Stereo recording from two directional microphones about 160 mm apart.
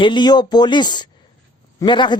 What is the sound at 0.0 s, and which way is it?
Speech, 30° left (ahead or behind).